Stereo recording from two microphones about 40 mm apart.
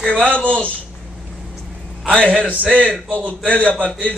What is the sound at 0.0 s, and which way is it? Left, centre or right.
Speech, centre.